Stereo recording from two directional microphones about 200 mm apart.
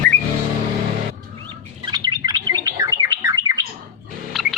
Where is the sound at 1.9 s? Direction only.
20° right (ahead or behind).